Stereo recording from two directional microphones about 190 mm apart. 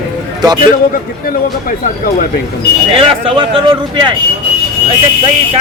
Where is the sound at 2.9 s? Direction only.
30° right (ahead or behind).